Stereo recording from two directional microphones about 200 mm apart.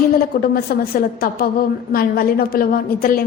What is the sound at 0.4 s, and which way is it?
A woman's voice, 50° left (ahead or behind).